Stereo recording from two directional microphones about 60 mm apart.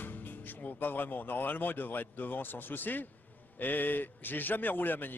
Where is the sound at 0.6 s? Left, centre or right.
Left.